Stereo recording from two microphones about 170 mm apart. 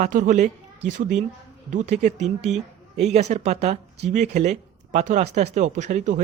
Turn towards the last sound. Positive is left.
turn(degrees=-45)  # may be behind; listen again after turning